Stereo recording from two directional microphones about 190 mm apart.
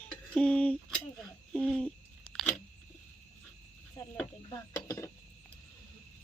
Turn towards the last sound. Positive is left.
turn(degrees=15)  # may be behind; listen again after turning